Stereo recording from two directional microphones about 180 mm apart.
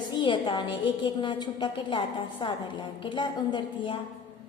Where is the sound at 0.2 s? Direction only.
25° left (ahead or behind).